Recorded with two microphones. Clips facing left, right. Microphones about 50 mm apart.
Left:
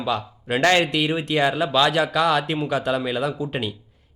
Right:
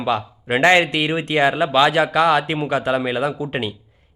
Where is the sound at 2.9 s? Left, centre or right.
Right.